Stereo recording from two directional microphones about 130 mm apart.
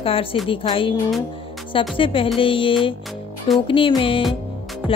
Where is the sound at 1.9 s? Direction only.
40° left (ahead or behind).